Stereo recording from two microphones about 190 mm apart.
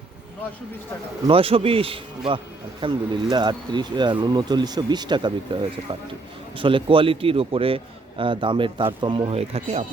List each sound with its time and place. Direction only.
1.3 s speech: 30° right (ahead or behind)